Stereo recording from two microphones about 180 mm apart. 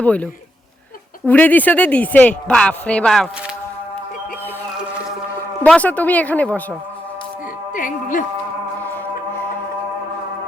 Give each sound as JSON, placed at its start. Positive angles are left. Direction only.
{"t": 0.0, "sound": "speech", "side_deg": 5}
{"t": 1.3, "sound": "speech", "side_deg": 10}
{"t": 5.6, "sound": "speech", "side_deg": 10}
{"t": 7.7, "sound": "music", "side_deg": 50}